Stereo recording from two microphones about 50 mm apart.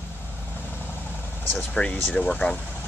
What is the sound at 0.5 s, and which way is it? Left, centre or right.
Vehicle, left.